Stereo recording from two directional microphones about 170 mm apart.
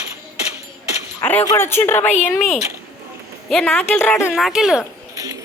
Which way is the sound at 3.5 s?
Centre (ahead or behind).